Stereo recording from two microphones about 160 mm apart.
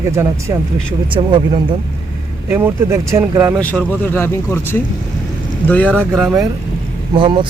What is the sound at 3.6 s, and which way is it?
Speech, 10° left (ahead or behind).